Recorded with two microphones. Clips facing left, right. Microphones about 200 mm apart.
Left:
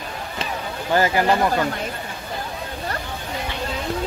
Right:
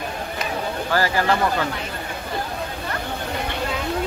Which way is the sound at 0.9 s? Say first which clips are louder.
Left 3 dB; 20° left (ahead or behind).